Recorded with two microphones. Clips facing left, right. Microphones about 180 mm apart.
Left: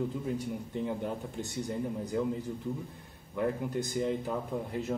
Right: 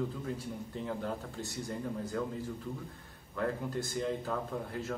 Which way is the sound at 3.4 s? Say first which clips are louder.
Left 3 dB; 20° left (ahead or behind).